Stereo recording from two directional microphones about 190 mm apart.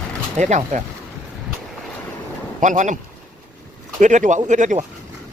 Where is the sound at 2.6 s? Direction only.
40° right (ahead or behind).